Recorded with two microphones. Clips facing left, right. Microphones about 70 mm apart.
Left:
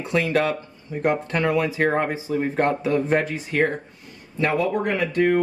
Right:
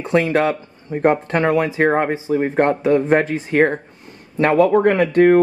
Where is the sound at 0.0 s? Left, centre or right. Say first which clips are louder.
Right 5 dB; right.